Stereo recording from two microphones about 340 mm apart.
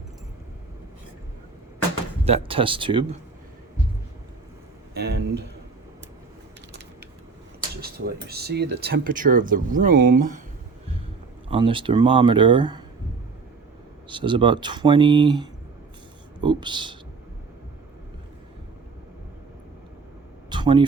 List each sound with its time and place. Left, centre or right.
2.2 s speech: centre
4.9 s speech: right
7.8 s speech: right
11.4 s speech: centre
14.1 s speech: centre
20.5 s a sound: centre